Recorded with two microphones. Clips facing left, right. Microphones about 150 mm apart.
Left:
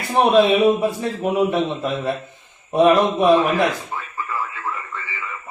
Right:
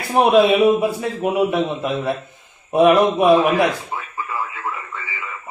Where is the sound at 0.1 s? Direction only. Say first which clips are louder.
Right 1 dB; 10° right (ahead or behind).